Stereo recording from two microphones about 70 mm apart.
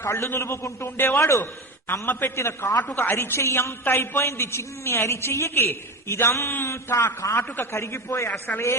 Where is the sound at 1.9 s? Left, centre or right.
Left.